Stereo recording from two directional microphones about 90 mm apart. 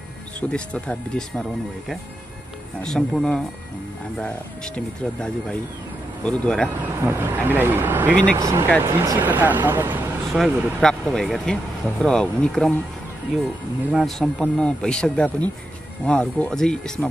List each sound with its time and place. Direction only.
0.4 s speech: 15° left (ahead or behind)
2.8 s speech: 5° left (ahead or behind)
4.7 s speech: 15° left (ahead or behind)
7.0 s speech: 20° right (ahead or behind)
8.4 s speech: 35° right (ahead or behind)
10.3 s speech: 5° left (ahead or behind)
13.9 s speech: 5° left (ahead or behind)